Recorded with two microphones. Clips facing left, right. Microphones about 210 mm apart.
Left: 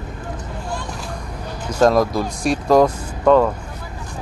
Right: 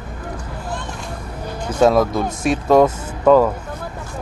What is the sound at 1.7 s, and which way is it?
Speech, centre (ahead or behind).